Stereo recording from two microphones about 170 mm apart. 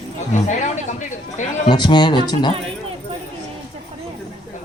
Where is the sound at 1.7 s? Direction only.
25° left (ahead or behind).